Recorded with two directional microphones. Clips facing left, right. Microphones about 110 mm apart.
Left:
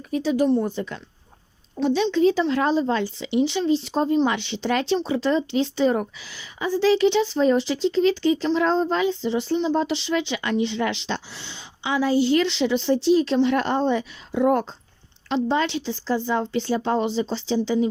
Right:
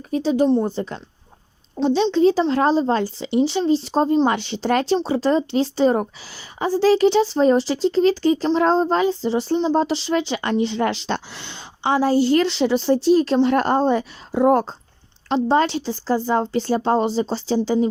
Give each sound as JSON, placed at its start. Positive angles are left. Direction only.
{"t": 0.1, "sound": "a woman's voice", "side_deg": -30}
{"t": 11.8, "sound": "a woman's voice", "side_deg": -40}